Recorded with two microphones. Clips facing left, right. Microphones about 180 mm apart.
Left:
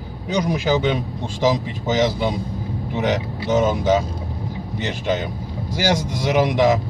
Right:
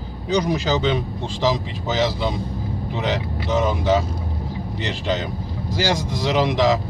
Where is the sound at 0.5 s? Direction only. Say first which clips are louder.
Left 1 dB; 10° left (ahead or behind).